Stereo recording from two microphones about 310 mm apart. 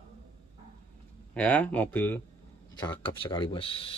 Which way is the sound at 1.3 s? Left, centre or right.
Centre.